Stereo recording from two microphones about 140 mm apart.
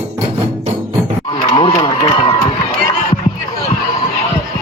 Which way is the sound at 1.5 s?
50° left (ahead or behind).